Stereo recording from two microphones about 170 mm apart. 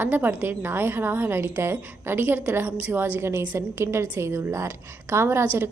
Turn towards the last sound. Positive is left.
turn(degrees=-15)  # may be behind; listen again after turning